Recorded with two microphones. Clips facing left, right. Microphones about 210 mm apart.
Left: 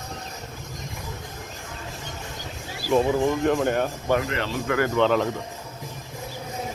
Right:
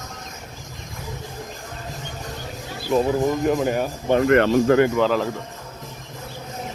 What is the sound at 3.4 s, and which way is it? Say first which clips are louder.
Speech: right 1 dB; 5° right (ahead or behind).